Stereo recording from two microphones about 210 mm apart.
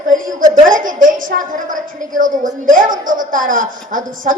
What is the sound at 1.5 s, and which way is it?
A woman's voice, 40° right (ahead or behind).